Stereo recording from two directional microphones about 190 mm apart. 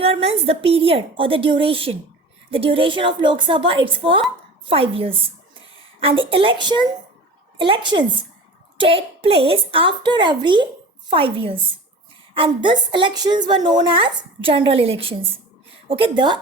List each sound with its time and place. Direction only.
0.0 s a woman's voice: 30° right (ahead or behind)